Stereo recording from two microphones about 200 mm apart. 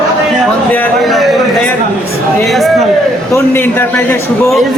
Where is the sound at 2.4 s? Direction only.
Centre (ahead or behind).